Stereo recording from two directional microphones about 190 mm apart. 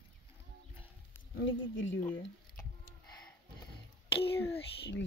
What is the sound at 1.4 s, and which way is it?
Speech, 80° left.